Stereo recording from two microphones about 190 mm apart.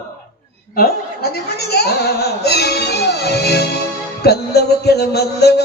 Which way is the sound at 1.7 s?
55° left (ahead or behind).